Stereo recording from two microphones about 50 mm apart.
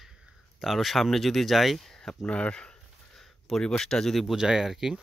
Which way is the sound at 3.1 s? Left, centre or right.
Centre.